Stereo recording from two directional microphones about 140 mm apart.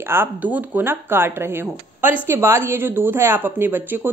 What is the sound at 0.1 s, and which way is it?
A woman's voice, 15° right (ahead or behind).